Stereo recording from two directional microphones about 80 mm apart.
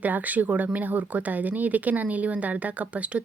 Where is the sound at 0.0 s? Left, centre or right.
Centre.